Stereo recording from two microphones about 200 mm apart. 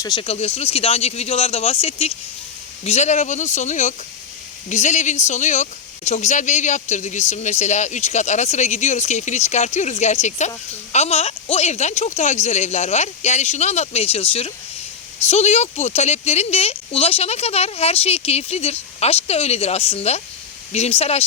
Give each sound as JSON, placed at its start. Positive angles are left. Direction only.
{"t": 0.0, "sound": "speech", "side_deg": 25}